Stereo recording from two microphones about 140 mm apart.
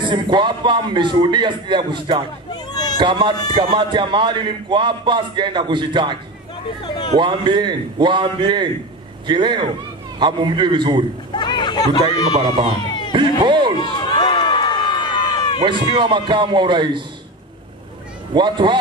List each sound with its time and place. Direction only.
0.0 s a man's voice: 35° right (ahead or behind)
2.5 s a sound: 30° left (ahead or behind)
3.0 s a man's voice: 35° right (ahead or behind)
7.2 s a man's voice: 35° right (ahead or behind)
11.3 s speech: 30° left (ahead or behind)
12.4 s a man's voice: 35° right (ahead or behind)
13.7 s a sound: 30° left (ahead or behind)
15.9 s a man's voice: 35° right (ahead or behind)
18.3 s a man's voice: 35° right (ahead or behind)